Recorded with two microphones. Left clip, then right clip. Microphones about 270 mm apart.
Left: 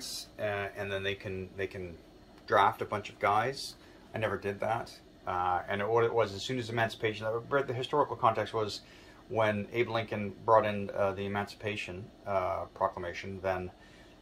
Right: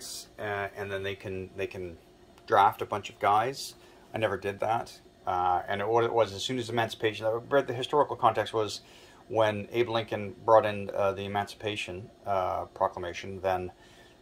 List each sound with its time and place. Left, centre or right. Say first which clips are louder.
0.4 s speech: right 1 dB; right